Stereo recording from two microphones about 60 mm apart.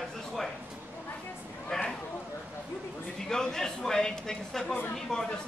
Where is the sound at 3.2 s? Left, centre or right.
Centre.